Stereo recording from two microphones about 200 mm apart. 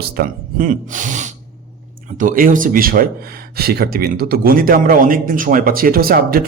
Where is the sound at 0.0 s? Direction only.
45° right (ahead or behind).